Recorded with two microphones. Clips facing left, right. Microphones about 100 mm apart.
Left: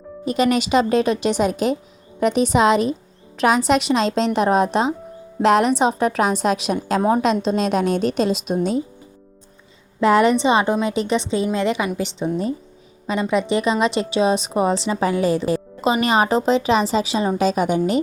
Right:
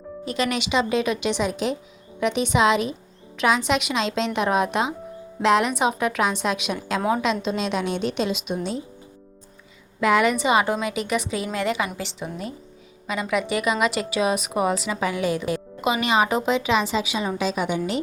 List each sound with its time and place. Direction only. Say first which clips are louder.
0.3 s a woman's voice: left 7 dB; 45° left (ahead or behind)
10.0 s a woman's voice: left 4 dB; 35° left (ahead or behind)